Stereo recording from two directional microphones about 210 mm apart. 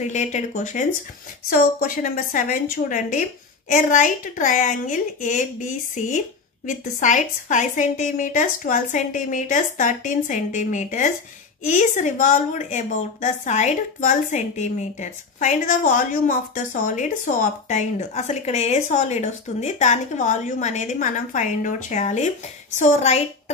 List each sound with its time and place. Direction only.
0.0 s a woman's voice: 35° left (ahead or behind)